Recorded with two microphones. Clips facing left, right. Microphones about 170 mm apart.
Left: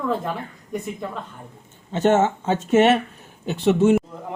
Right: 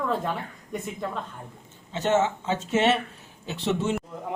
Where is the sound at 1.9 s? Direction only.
50° left (ahead or behind).